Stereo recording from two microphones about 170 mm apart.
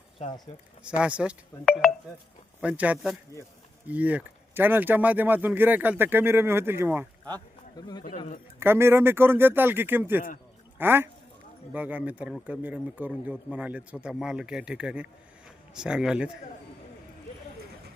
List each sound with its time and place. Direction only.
0.2 s speech: 25° left (ahead or behind)
0.9 s speech: 5° right (ahead or behind)
1.6 s speech: 5° left (ahead or behind)
2.6 s speech: 10° right (ahead or behind)
7.8 s speech: 25° left (ahead or behind)
8.5 s speech: 15° right (ahead or behind)